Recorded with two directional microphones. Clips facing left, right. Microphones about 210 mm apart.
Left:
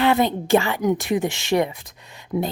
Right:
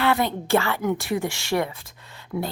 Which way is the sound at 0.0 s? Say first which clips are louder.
Left 4 dB; 20° left (ahead or behind).